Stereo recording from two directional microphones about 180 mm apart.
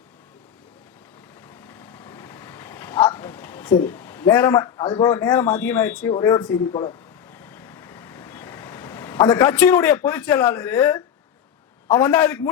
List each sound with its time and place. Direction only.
1.5 s vehicle: 10° left (ahead or behind)
3.7 s a man's voice: 15° left (ahead or behind)
4.8 s speech: 30° left (ahead or behind)
5.0 s speech: 15° left (ahead or behind)
7.3 s vehicle: 10° left (ahead or behind)
11.9 s speech: 10° left (ahead or behind)